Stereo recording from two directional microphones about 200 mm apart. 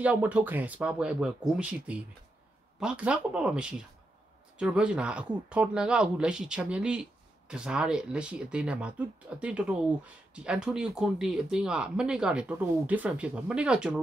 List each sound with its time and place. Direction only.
0.0 s speech: 5° right (ahead or behind)